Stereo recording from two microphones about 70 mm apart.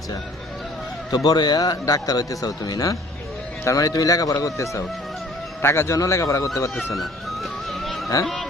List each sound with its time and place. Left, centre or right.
1.1 s a man's voice: left
6.7 s speech: centre
7.7 s music: centre
8.2 s speech: centre